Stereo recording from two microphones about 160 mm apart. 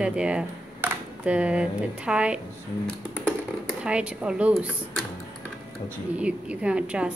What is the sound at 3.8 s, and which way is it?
Speech, 5° right (ahead or behind).